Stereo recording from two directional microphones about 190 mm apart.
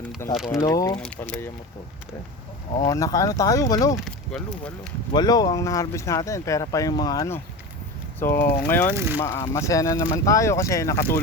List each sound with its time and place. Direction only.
0.3 s speech: centre (ahead or behind)
0.6 s speech: 20° left (ahead or behind)
1.0 s speech: 5° left (ahead or behind)
2.8 s speech: 20° left (ahead or behind)
4.0 s speech: 5° left (ahead or behind)
5.1 s speech: 20° left (ahead or behind)